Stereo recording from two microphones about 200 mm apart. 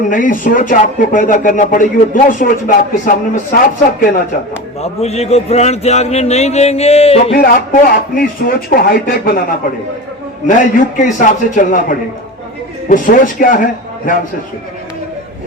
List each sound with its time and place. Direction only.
0.1 s speech: 40° left (ahead or behind)
4.8 s speech: 30° left (ahead or behind)
7.3 s a man's voice: 45° left (ahead or behind)